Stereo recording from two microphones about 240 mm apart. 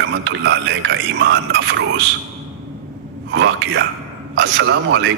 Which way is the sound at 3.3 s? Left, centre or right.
Right.